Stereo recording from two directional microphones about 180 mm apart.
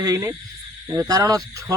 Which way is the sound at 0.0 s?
20° right (ahead or behind).